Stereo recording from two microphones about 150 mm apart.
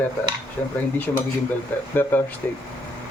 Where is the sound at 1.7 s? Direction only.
10° left (ahead or behind).